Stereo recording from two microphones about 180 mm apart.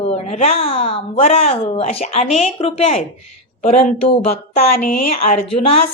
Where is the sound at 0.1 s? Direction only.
35° left (ahead or behind).